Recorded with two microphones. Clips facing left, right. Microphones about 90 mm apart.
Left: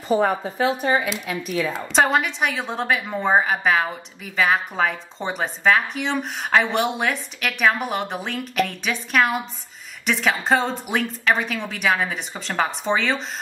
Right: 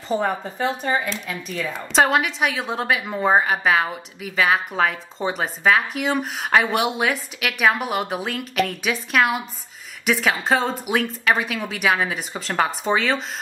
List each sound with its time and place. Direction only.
0.1 s a woman's voice: 5° left (ahead or behind)